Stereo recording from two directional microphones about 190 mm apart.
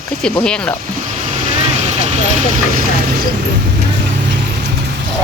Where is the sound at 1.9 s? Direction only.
35° right (ahead or behind).